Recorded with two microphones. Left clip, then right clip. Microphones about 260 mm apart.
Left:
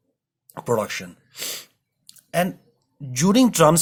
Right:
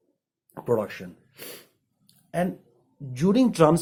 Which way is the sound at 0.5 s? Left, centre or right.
Left.